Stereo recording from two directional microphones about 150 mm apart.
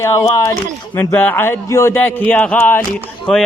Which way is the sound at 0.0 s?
20° left (ahead or behind).